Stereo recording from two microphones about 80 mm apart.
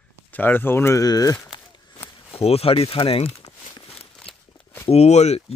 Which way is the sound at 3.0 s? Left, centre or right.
Left.